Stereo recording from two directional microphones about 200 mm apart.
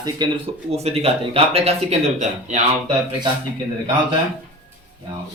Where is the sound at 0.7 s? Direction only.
30° right (ahead or behind).